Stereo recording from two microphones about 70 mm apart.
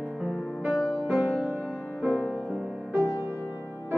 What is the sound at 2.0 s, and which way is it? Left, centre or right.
Music, centre.